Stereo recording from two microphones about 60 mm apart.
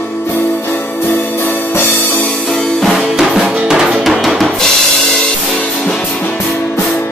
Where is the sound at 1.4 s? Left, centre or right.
Left.